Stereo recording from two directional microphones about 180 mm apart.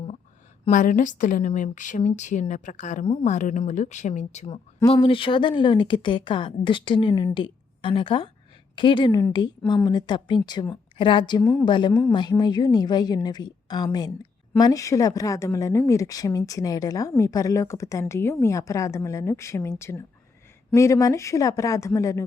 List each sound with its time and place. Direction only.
0.7 s a woman's voice: 45° left (ahead or behind); by 22.3 s 15° left (ahead or behind)